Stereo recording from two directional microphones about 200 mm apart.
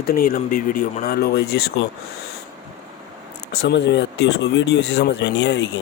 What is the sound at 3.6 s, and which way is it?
Speech, 60° left (ahead or behind).